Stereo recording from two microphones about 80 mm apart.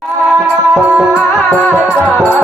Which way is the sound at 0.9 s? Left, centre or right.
Centre.